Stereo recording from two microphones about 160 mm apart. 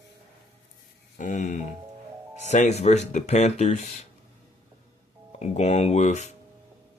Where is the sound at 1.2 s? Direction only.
50° left (ahead or behind).